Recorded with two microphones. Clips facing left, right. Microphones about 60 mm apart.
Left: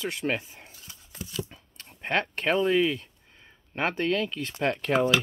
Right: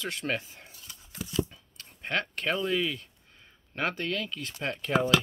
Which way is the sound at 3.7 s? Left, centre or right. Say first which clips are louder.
Left 4 dB; left.